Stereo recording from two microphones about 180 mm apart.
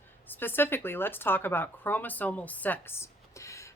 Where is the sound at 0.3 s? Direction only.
10° left (ahead or behind).